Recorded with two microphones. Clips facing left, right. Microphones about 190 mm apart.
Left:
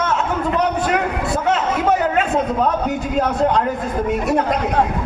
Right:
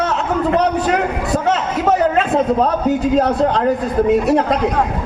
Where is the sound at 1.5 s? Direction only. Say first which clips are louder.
Right 1 dB; 35° right (ahead or behind).